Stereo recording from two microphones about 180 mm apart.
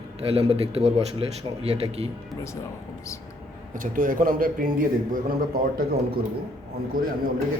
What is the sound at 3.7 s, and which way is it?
A man's voice, 50° right (ahead or behind).